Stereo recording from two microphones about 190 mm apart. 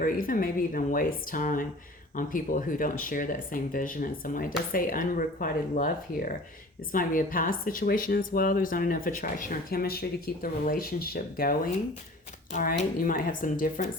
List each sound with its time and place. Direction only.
0.0 s speech: 45° left (ahead or behind)
12.5 s speech: 40° left (ahead or behind)